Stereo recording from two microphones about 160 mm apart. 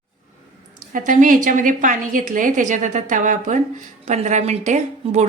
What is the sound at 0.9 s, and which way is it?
A woman's voice, 55° right (ahead or behind).